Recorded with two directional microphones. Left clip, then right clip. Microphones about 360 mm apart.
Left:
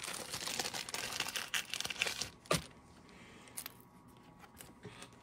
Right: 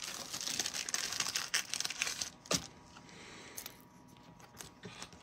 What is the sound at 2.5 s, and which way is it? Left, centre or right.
Vehicle, left.